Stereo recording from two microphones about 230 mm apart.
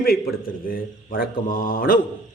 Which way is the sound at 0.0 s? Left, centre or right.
Left.